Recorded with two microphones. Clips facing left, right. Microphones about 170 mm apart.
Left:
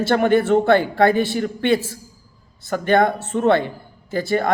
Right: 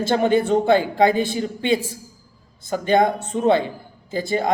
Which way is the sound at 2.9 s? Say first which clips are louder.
Left 1 dB; 15° right (ahead or behind).